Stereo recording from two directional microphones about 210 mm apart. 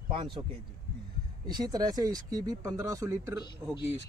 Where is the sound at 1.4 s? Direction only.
20° right (ahead or behind).